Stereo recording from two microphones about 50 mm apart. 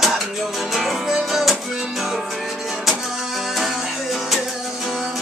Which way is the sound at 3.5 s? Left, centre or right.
Centre.